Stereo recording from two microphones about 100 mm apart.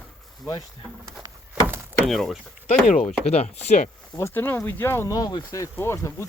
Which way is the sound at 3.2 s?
90° left.